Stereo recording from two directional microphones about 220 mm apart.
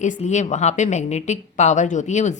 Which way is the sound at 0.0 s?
30° left (ahead or behind).